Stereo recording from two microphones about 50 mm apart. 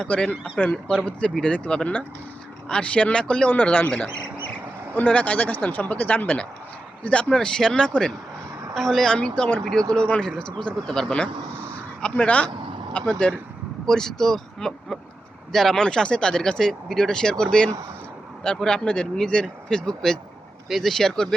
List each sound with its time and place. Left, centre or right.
0.1 s speech: left
3.5 s speech: left
4.9 s a woman's voice: left; by 9.1 s centre
9.1 s speech: left
13.8 s speech: centre